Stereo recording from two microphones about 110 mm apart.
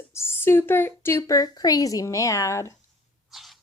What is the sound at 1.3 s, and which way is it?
A woman's voice, 35° left (ahead or behind).